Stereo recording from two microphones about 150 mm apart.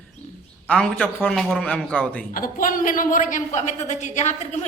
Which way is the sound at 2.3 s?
65° left (ahead or behind).